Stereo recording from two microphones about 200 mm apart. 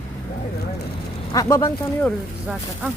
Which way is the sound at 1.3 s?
15° left (ahead or behind).